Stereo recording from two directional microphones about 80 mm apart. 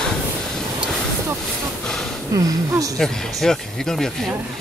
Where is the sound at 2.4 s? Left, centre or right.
Right.